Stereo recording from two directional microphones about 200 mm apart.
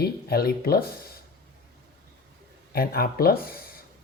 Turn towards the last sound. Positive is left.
turn(degrees=50)  # may be behind; listen again after turning